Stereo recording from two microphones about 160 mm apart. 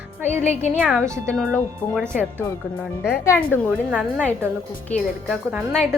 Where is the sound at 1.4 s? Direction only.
5° left (ahead or behind).